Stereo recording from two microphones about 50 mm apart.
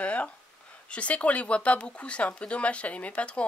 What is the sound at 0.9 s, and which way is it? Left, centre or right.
Speech, left.